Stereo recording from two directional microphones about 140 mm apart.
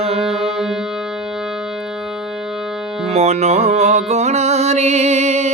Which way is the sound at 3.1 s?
50° right (ahead or behind).